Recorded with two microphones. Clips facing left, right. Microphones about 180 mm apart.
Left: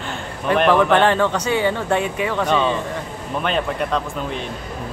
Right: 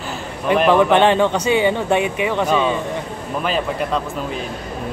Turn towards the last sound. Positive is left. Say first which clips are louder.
# right 1 dB
turn(degrees=0)  # may be behind; listen again after turning